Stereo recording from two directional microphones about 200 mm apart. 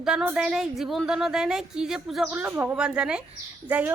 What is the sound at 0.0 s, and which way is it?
Speech, 5° right (ahead or behind).